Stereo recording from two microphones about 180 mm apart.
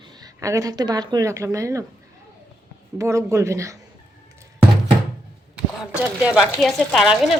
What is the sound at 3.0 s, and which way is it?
Speech, 15° right (ahead or behind).